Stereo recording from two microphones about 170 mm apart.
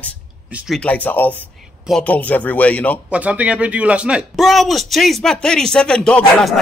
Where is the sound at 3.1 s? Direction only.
10° right (ahead or behind).